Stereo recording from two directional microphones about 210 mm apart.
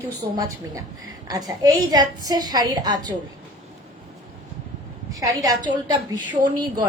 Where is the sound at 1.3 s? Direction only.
15° right (ahead or behind).